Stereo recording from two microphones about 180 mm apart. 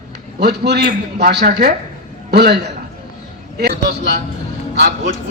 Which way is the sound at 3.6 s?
70° right (ahead or behind).